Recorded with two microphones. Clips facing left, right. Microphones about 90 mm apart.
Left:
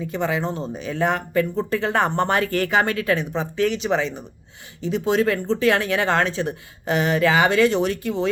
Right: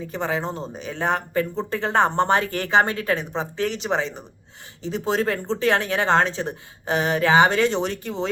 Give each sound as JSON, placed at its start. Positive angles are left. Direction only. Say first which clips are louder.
{"t": 0.1, "sound": "speech", "louder": "left 1 dB", "side_deg": -35}